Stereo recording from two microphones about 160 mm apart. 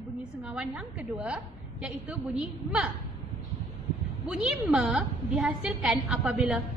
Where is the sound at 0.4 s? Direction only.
5° right (ahead or behind).